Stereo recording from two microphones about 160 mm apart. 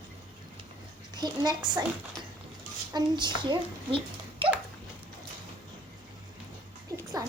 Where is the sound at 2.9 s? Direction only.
30° right (ahead or behind).